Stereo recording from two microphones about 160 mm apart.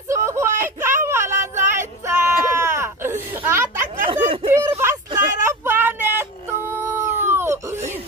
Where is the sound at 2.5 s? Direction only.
15° right (ahead or behind).